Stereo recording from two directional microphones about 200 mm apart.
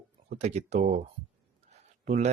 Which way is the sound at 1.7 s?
35° right (ahead or behind).